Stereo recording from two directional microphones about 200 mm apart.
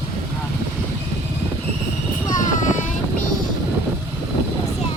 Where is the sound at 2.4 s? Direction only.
40° left (ahead or behind).